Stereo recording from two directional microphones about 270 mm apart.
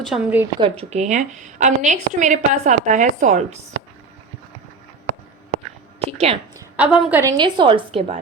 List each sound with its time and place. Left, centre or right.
0.0 s a woman's voice: centre
0.6 s a woman's voice: right
6.1 s a woman's voice: right
6.7 s a woman's voice: centre; by 8.2 s right